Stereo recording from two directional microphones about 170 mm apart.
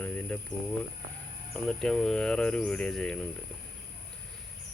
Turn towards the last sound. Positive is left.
turn(degrees=5)  # may be behind; listen again after turning